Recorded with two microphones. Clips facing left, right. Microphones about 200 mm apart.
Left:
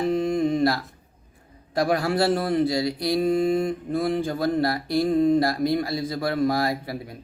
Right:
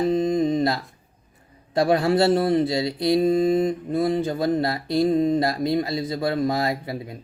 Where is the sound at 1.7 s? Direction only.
25° right (ahead or behind).